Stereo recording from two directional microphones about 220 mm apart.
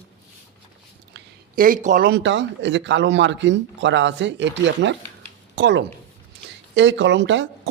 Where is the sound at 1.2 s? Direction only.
40° right (ahead or behind).